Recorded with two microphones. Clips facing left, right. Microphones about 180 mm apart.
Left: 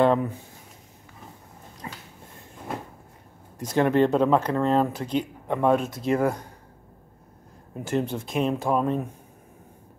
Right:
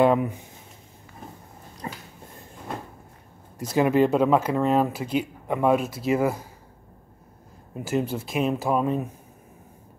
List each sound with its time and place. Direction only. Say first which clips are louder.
0.0 s speech: right 1 dB; 10° right (ahead or behind)
1.8 s dog: right 4 dB; 35° right (ahead or behind)
3.5 s speech: right 1 dB; 10° right (ahead or behind)
7.7 s speech: right 1 dB; 5° right (ahead or behind)